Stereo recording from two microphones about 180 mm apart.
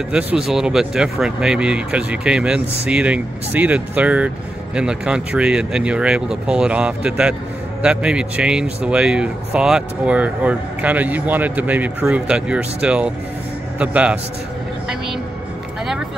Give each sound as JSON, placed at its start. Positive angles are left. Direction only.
{"t": 0.1, "sound": "speech", "side_deg": -5}